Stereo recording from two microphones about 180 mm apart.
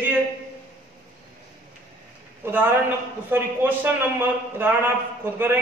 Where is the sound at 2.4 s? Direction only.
10° right (ahead or behind).